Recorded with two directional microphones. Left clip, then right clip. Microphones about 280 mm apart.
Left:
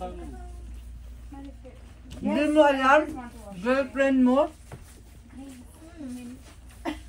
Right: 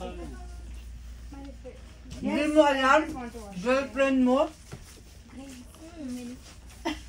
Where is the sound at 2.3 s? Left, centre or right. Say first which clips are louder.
Left 2 dB; left.